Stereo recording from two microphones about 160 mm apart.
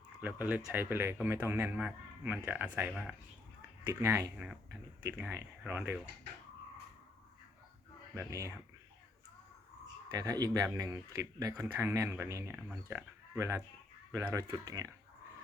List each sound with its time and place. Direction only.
0.2 s a man's voice: 10° right (ahead or behind)
4.0 s a man's voice: 15° right (ahead or behind)
8.1 s speech: 20° right (ahead or behind)
10.1 s a man's voice: 25° right (ahead or behind)